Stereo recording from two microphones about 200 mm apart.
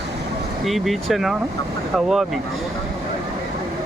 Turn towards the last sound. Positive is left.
turn(degrees=0)  # may be behind; listen again after turning